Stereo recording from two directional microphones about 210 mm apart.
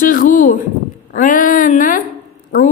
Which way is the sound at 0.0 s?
40° left (ahead or behind).